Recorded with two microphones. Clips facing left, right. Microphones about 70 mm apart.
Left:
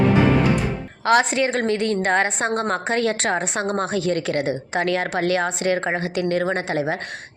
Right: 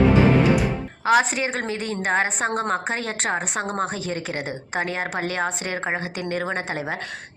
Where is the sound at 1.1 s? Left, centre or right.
Left.